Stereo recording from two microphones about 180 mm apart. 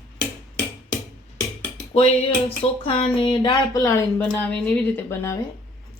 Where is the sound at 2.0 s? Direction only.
35° left (ahead or behind); by 5.4 s 15° left (ahead or behind).